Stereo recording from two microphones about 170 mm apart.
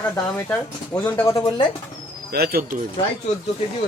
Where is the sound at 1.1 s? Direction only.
15° left (ahead or behind).